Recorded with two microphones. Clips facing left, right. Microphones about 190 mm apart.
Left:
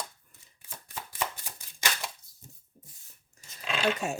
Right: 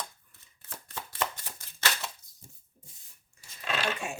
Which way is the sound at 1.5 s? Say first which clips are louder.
Right 1 dB; 15° left (ahead or behind).